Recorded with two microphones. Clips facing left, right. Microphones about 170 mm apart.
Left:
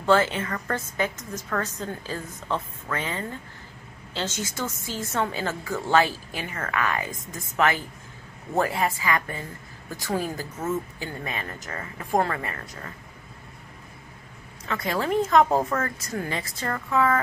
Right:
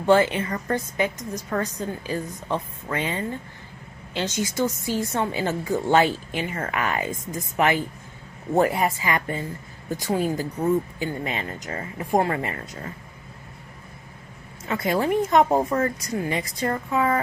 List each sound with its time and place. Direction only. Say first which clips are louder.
0.0 s a woman's voice: right 3 dB; 15° right (ahead or behind)
14.7 s a woman's voice: right 3 dB; 20° right (ahead or behind)